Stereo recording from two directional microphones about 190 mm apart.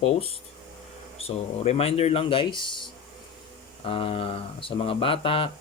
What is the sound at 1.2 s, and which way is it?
Speech, 35° left (ahead or behind).